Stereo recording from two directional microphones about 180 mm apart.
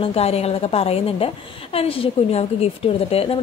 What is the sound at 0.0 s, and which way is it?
A woman's voice, 35° left (ahead or behind).